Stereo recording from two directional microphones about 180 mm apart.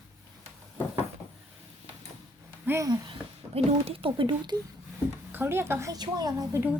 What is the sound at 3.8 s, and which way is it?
Speech, 30° right (ahead or behind).